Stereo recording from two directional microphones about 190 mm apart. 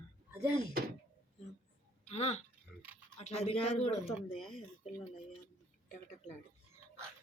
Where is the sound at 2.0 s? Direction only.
35° left (ahead or behind).